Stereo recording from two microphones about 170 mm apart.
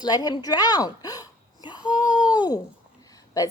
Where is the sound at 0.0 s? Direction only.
25° left (ahead or behind).